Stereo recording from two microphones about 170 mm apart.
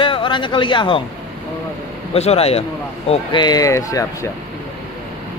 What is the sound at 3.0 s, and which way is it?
A man's voice, 25° left (ahead or behind).